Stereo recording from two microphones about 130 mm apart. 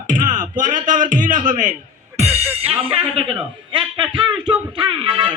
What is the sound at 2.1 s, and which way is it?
Music, 55° right (ahead or behind).